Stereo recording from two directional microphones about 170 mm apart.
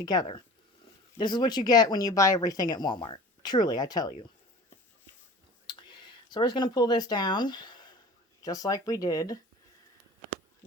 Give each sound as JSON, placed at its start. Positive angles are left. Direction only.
{"t": 0.0, "sound": "speech", "side_deg": 25}
{"t": 6.3, "sound": "speech", "side_deg": 25}